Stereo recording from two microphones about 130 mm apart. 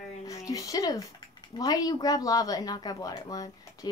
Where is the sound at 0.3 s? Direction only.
25° left (ahead or behind).